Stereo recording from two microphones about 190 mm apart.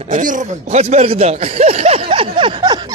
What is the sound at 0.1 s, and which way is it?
Speech, 40° right (ahead or behind).